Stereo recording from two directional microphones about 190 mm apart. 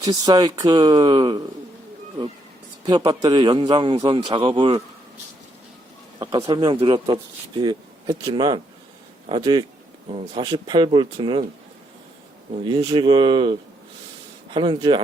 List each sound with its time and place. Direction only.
0.0 s speech: 20° right (ahead or behind)
2.8 s speech: 20° right (ahead or behind)
6.1 s speech: 25° right (ahead or behind)
12.6 s speech: 25° right (ahead or behind)